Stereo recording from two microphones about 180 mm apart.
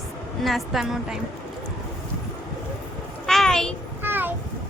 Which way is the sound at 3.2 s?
Centre (ahead or behind).